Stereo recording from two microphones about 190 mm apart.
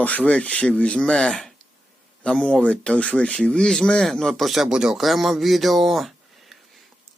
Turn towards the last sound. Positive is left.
turn(degrees=0)  # may be behind; listen again after turning